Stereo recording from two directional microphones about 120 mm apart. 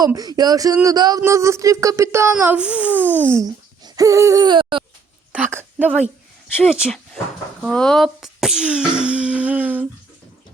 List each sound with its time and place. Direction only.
0.0 s speech: 35° right (ahead or behind); by 3.3 s 15° right (ahead or behind)
3.3 s a child's voice: 30° right (ahead or behind)
5.3 s a sound: 15° right (ahead or behind)
6.6 s speech: 5° right (ahead or behind)
7.6 s speech: 5° left (ahead or behind); by 9.8 s 15° right (ahead or behind)